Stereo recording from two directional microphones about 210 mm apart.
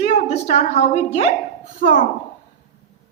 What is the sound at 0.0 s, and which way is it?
A woman's voice, 35° left (ahead or behind).